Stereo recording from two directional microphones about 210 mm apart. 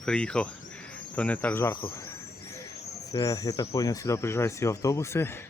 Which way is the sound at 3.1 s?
15° left (ahead or behind).